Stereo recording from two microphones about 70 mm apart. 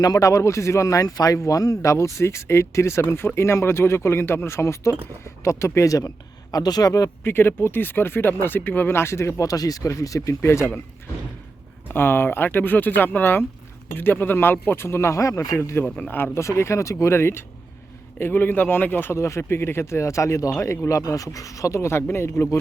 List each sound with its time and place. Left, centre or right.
0.0 s speech: left
7.3 s speech: left
9.4 s speech: left
11.9 s speech: left
15.5 s speech: left
15.8 s speech: left